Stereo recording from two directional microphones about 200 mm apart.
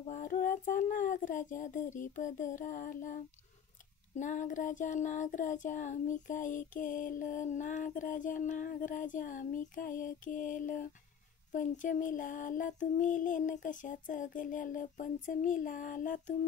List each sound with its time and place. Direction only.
0.0 s child singing: 40° left (ahead or behind)
4.2 s child singing: 40° left (ahead or behind)